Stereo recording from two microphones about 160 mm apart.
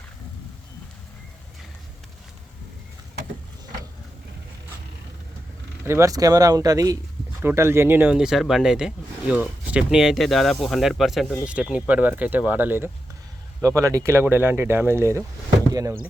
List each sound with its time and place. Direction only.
5.8 s speech: 15° right (ahead or behind)